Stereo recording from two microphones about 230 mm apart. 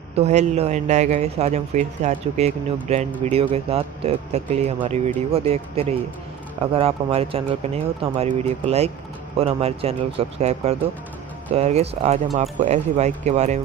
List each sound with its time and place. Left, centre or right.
0.1 s a man's voice: right